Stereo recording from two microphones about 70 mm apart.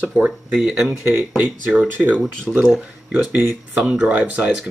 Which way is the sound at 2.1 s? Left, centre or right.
Centre.